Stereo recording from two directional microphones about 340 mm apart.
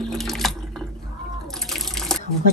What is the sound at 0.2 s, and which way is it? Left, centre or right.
Water, centre.